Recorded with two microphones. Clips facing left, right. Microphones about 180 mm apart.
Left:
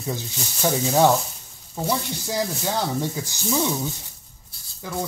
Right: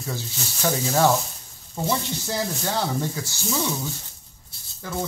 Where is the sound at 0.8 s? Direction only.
Centre (ahead or behind).